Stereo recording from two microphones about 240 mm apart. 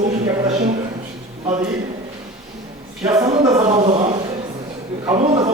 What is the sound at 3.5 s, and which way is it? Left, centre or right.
Speech, right.